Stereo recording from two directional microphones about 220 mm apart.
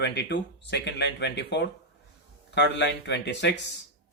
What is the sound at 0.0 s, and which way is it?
Speech, 50° left (ahead or behind).